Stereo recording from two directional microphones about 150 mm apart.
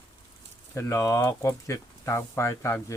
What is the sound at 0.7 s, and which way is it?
Speech, 15° left (ahead or behind).